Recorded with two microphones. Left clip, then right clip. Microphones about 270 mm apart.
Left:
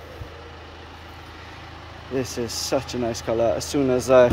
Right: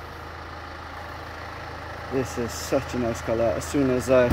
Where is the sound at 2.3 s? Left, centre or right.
Centre.